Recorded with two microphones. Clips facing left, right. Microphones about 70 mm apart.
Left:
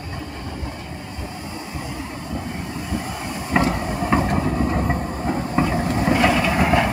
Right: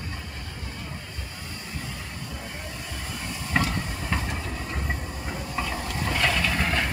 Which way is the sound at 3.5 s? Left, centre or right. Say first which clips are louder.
Left 7 dB; left.